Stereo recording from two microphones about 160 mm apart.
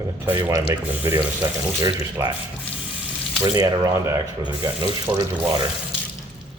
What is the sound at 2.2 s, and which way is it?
Speech, 20° right (ahead or behind).